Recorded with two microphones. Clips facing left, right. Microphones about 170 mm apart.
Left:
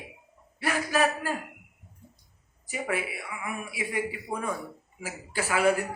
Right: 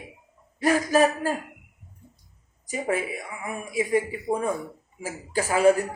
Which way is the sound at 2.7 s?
40° right (ahead or behind).